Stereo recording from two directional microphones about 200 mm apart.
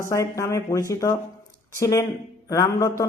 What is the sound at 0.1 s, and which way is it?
A man's voice, 15° left (ahead or behind).